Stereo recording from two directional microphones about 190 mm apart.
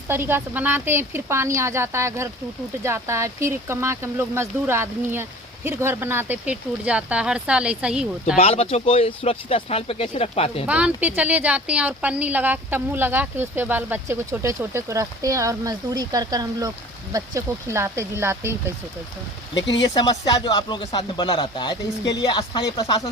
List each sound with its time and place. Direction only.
0.1 s a woman's voice: 10° right (ahead or behind)
8.4 s speech: 30° left (ahead or behind)
10.7 s a woman's voice: 5° right (ahead or behind)
19.7 s speech: 20° left (ahead or behind)